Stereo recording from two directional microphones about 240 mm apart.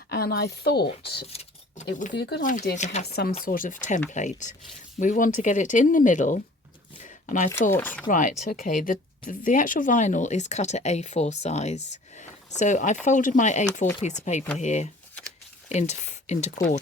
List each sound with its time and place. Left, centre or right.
0.1 s speech: left
1.3 s a sound: left
2.0 s speech: left
3.1 s speech: left
7.0 s a sound: left
7.7 s speech: centre
8.0 s speech: left